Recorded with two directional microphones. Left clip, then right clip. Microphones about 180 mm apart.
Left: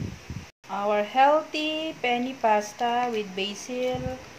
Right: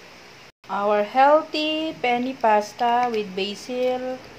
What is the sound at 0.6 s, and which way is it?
Speech, 15° right (ahead or behind).